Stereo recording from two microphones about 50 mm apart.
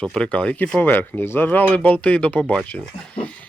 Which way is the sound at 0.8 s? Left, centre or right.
Left.